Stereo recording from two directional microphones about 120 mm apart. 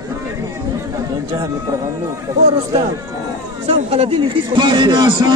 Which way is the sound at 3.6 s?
55° right (ahead or behind).